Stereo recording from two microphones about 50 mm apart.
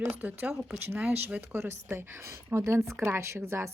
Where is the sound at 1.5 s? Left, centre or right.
Right.